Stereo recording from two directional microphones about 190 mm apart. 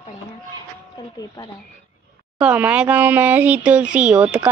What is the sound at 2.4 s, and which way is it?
A woman's voice, 5° right (ahead or behind).